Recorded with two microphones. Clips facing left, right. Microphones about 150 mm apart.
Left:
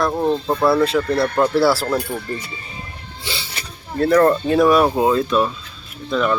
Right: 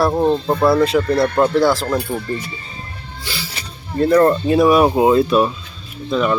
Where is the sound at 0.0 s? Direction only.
20° right (ahead or behind).